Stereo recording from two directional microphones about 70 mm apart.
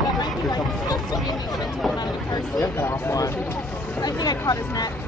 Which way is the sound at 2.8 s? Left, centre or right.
Left.